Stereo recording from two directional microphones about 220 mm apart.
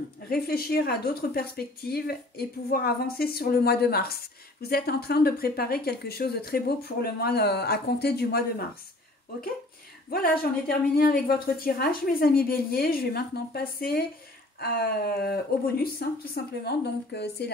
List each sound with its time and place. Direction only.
0.3 s a woman's voice: 45° left (ahead or behind)
10.0 s a woman's voice: 45° left (ahead or behind)